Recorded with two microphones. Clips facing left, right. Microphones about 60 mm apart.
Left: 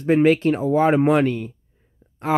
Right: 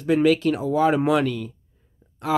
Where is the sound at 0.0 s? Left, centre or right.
Left.